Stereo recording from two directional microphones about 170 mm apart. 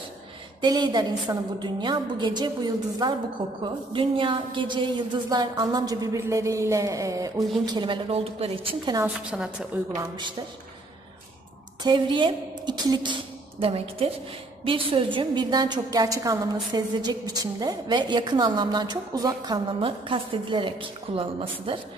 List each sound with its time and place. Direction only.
0.6 s a woman's voice: 25° right (ahead or behind)
9.3 s a woman's voice: 5° right (ahead or behind)
9.9 s a woman's voice: 25° right (ahead or behind)
11.8 s a woman's voice: 30° right (ahead or behind)